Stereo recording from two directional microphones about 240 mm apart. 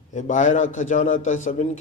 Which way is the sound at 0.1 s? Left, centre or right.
Left.